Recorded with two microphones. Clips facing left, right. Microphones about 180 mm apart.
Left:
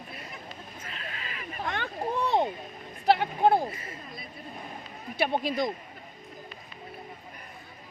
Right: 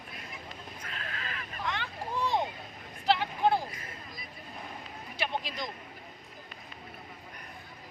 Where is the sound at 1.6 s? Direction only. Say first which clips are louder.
Left 5 dB; 55° left (ahead or behind).